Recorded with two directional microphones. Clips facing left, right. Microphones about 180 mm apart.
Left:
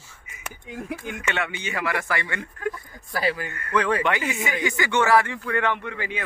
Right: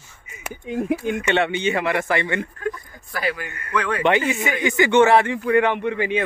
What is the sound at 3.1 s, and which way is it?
Speech, 35° left (ahead or behind).